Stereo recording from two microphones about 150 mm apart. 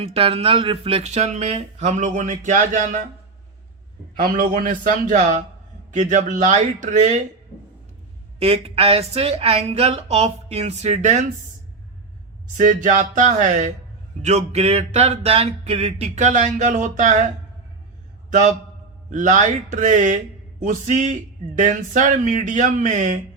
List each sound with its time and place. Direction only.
0.0 s speech: 40° right (ahead or behind); by 3.0 s 55° right (ahead or behind)
4.2 s a man's voice: 65° right (ahead or behind)
8.4 s speech: 40° right (ahead or behind)
12.5 s a man's voice: 55° right (ahead or behind)
18.3 s a man's voice: 55° right (ahead or behind)